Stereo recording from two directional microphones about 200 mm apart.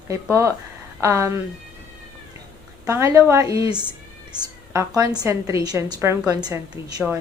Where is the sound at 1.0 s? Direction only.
15° right (ahead or behind).